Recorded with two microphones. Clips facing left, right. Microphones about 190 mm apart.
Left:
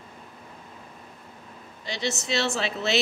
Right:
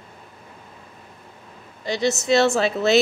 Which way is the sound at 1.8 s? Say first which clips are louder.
Right 9 dB; 40° right (ahead or behind).